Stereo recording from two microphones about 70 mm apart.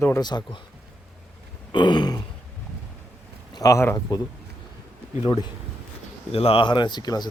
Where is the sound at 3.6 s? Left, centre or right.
Left.